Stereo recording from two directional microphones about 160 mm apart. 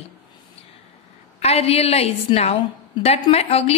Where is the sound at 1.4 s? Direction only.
40° left (ahead or behind).